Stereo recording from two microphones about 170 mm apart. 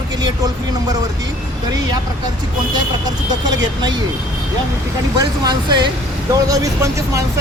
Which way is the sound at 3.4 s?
25° right (ahead or behind).